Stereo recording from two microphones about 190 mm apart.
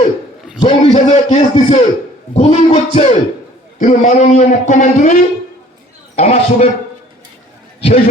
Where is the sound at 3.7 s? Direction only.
40° left (ahead or behind).